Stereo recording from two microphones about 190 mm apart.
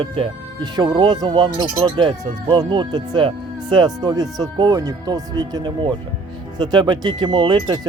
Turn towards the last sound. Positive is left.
turn(degrees=-25)  # may be behind; listen again after turning